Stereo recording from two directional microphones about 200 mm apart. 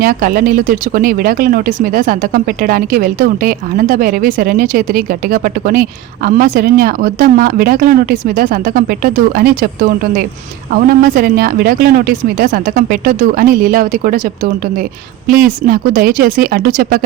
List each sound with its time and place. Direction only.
0.0 s speech: 45° right (ahead or behind)